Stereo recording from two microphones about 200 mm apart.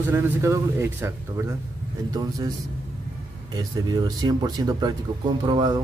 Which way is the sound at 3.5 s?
20° right (ahead or behind).